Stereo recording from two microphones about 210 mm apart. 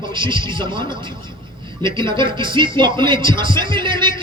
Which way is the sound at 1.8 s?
20° right (ahead or behind).